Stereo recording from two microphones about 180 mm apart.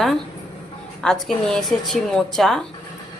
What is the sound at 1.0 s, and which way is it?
A woman's voice, centre (ahead or behind).